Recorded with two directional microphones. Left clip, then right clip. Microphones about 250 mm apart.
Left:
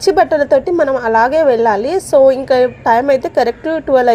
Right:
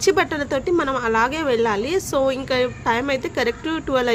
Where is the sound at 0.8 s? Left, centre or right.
Centre.